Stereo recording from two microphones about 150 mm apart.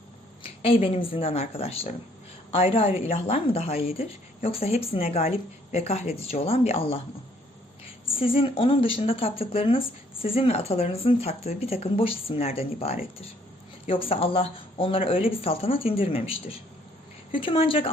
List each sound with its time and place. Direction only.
0.4 s a woman's voice: 40° left (ahead or behind)
8.1 s speech: 40° left (ahead or behind)